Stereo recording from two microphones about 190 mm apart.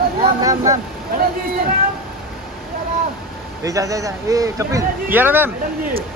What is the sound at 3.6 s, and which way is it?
A man's voice, 15° right (ahead or behind).